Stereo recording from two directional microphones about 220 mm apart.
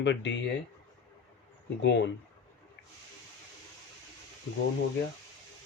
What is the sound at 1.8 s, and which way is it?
Speech, 50° left (ahead or behind).